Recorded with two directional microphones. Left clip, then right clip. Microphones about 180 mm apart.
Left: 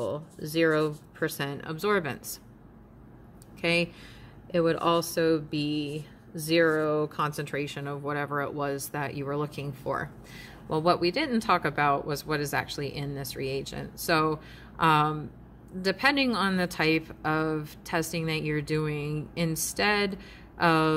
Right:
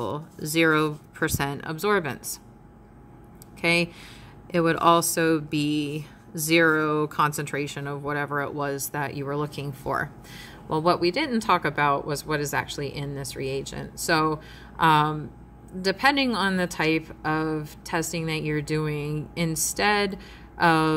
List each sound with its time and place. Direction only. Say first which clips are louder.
0.0 s speech: right 2 dB; 20° right (ahead or behind); by 2.4 s 5° right (ahead or behind)
3.6 s speech: right 4 dB; 10° right (ahead or behind)
4.5 s speech: right 5 dB; 20° right (ahead or behind); by 20.9 s centre (ahead or behind)